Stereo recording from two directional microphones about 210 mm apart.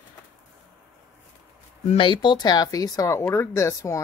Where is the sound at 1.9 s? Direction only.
25° left (ahead or behind).